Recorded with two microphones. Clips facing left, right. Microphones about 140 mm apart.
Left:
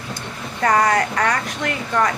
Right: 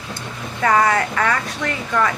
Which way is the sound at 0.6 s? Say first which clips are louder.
Even; 40° left (ahead or behind).